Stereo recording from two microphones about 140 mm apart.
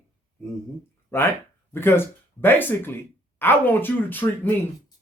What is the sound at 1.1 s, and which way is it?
Speech, 20° left (ahead or behind).